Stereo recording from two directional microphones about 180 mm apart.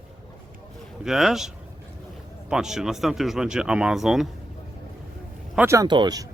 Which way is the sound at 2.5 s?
5° right (ahead or behind).